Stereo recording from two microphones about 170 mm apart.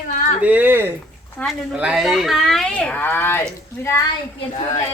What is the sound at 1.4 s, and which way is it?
Speech, 10° left (ahead or behind).